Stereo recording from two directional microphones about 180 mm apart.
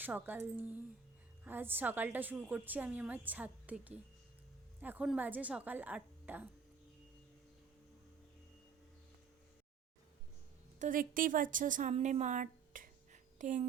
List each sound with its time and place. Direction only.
0.0 s a woman's voice: 10° right (ahead or behind)
10.8 s speech: 50° right (ahead or behind)